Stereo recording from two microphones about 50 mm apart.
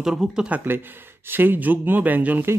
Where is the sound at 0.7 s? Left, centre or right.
Right.